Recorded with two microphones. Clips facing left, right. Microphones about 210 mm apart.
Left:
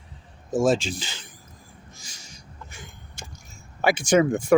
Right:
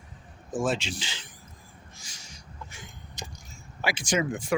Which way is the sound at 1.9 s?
45° left (ahead or behind).